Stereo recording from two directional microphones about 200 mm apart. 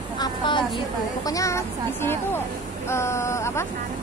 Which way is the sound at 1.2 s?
15° left (ahead or behind).